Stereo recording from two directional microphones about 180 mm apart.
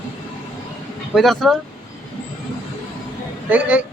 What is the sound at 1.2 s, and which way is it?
Speech, centre (ahead or behind).